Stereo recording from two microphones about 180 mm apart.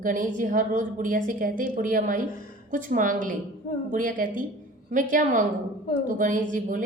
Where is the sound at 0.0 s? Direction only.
45° right (ahead or behind).